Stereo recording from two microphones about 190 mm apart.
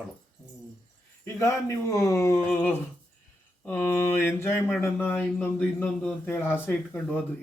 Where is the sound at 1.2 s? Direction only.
15° left (ahead or behind).